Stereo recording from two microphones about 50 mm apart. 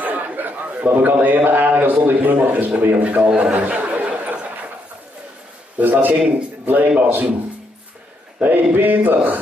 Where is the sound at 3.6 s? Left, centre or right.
Right.